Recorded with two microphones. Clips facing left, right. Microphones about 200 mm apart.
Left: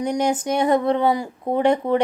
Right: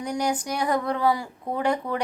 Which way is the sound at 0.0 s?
25° left (ahead or behind).